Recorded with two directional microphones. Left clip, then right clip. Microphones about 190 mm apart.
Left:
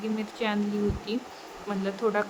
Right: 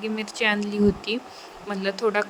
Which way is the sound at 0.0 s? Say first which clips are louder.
Right 6 dB; 35° right (ahead or behind).